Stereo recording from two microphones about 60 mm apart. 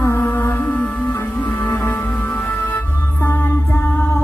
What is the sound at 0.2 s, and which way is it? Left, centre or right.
Music, left.